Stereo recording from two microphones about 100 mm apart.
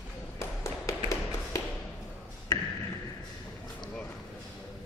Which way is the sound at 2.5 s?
40° left (ahead or behind).